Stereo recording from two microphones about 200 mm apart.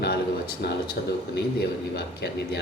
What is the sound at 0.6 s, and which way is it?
Speech, 55° left (ahead or behind).